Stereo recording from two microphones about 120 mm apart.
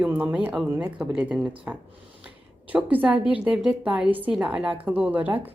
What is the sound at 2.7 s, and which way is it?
A woman's voice, 15° right (ahead or behind).